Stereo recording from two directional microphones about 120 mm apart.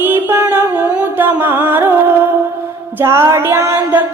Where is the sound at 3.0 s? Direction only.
20° right (ahead or behind).